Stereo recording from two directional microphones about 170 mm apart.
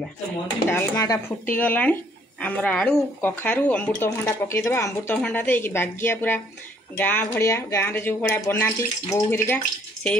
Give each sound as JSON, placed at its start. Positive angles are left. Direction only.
{"t": 0.7, "sound": "speech", "side_deg": 15}
{"t": 1.6, "sound": "speech", "side_deg": 10}